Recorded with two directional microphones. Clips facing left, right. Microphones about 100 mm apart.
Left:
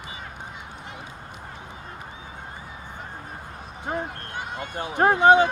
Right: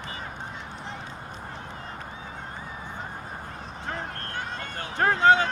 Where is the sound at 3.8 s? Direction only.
15° left (ahead or behind).